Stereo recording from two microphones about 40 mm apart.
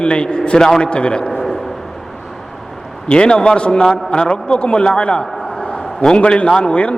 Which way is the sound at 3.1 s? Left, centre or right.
Left.